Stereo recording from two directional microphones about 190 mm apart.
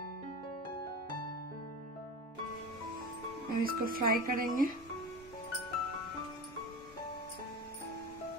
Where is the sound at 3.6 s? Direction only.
50° right (ahead or behind).